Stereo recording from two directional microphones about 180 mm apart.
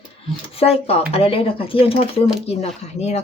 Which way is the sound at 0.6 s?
35° left (ahead or behind).